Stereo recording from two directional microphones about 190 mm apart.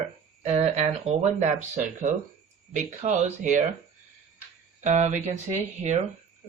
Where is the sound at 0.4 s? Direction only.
35° right (ahead or behind).